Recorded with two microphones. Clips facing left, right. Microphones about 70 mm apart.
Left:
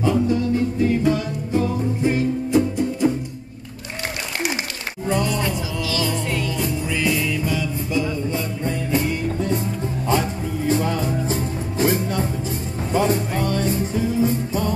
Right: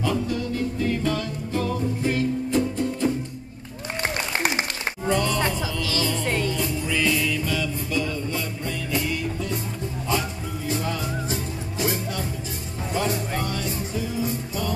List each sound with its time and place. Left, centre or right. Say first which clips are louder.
0.0 s music: left 6 dB; left
5.1 s music: left 2 dB; centre
6.2 s music: even; right
6.6 s music: left 2 dB; centre; by 9.6 s left
10.7 s music: left 6 dB; left